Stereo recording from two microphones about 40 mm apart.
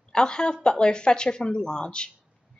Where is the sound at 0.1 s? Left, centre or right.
Left.